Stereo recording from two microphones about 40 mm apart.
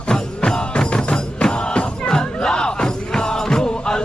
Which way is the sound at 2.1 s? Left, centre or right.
Centre.